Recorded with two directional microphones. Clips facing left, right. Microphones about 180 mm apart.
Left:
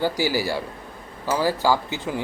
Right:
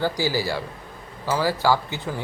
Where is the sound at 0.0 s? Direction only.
15° left (ahead or behind).